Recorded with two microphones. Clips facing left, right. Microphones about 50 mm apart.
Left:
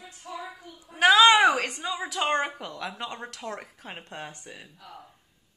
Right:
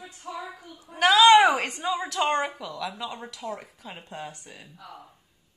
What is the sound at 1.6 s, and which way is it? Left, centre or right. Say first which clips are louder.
Speech: even; right.